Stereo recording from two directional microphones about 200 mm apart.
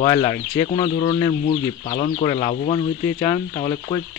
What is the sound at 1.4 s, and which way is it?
Speech, 40° left (ahead or behind).